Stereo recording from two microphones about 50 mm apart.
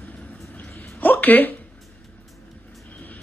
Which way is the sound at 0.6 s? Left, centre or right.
Left.